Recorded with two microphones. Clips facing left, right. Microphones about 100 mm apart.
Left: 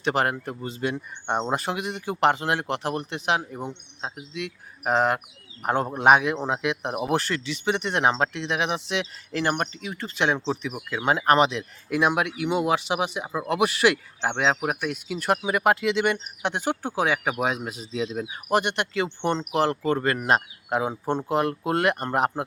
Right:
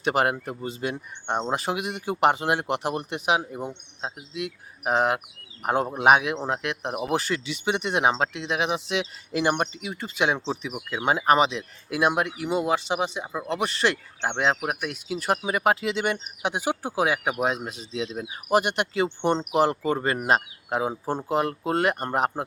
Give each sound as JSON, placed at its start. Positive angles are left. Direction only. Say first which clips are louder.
{"t": 0.0, "sound": "speech", "louder": "right 1 dB", "side_deg": -10}